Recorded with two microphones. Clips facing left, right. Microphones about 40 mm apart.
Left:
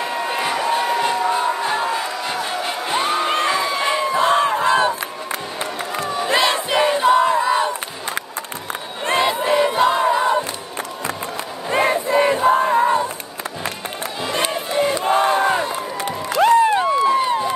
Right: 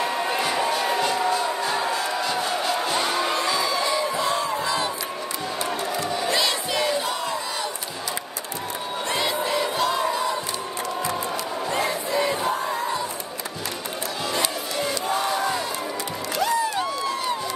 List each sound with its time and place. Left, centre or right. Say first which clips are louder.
0.2 s crowd: left 2 dB; centre; by 4.9 s left
5.6 s battle cry: even; left
9.0 s crowd: left 7 dB; left
11.7 s battle cry: left 9 dB; left
14.3 s music: left 8 dB; left
16.8 s crowd: left 9 dB; left